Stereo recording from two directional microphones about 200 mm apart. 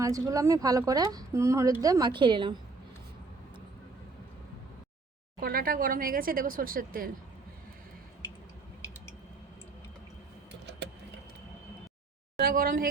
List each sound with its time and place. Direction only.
0.0 s a woman's voice: 15° right (ahead or behind)
5.4 s speech: 45° right (ahead or behind)
12.4 s speech: 45° right (ahead or behind)